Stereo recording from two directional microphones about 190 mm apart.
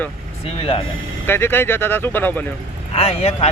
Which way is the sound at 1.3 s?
10° left (ahead or behind).